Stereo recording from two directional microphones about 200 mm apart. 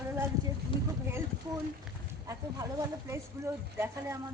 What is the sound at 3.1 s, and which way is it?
Speech, 15° right (ahead or behind).